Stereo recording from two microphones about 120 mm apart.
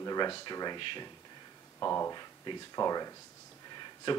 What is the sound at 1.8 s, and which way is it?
Speech, 25° left (ahead or behind).